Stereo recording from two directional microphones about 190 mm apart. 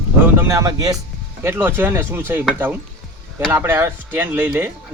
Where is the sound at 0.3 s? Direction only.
15° right (ahead or behind).